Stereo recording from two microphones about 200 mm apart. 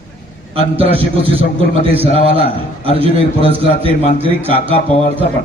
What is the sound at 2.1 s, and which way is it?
Speech, 30° left (ahead or behind).